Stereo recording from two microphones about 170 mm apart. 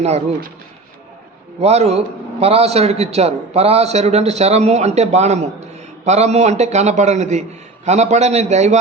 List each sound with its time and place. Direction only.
0.0 s a man's voice: 40° right (ahead or behind)
1.5 s a man's voice: 40° right (ahead or behind)